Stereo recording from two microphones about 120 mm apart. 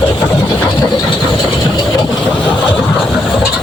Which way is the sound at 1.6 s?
30° left (ahead or behind).